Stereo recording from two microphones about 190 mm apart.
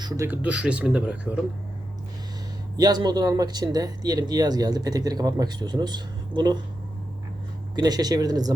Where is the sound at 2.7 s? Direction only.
20° right (ahead or behind).